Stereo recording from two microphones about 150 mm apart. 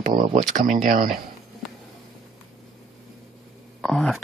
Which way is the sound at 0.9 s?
65° right (ahead or behind).